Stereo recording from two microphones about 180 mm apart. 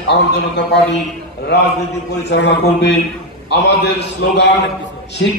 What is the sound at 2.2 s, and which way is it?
A man's voice, 75° left (ahead or behind).